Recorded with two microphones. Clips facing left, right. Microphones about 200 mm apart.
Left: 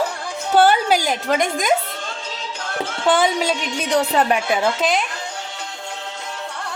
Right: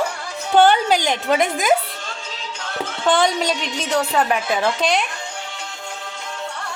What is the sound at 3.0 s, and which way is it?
Speech, 5° left (ahead or behind).